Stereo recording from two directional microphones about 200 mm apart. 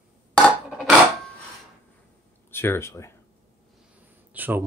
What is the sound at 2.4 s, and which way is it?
Speech, 10° left (ahead or behind).